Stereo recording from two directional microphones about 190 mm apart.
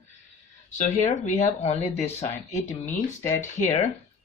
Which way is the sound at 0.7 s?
40° left (ahead or behind).